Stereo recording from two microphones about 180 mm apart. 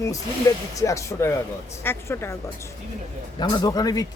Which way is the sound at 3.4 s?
25° left (ahead or behind).